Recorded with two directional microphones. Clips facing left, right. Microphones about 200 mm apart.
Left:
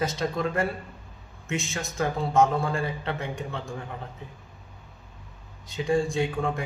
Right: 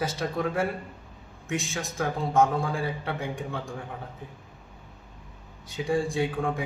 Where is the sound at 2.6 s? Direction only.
Centre (ahead or behind).